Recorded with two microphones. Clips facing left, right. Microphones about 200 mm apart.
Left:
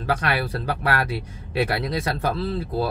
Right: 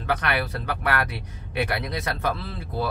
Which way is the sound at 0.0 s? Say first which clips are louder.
Left 2 dB; 30° left (ahead or behind).